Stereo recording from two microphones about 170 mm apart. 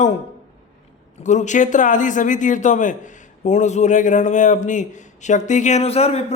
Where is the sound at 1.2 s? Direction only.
45° left (ahead or behind).